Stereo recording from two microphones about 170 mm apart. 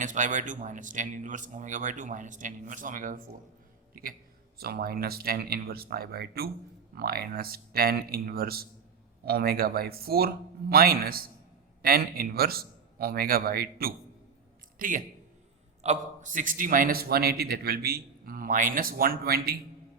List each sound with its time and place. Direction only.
0.0 s a man's voice: 50° right (ahead or behind)
4.5 s a man's voice: 65° right (ahead or behind)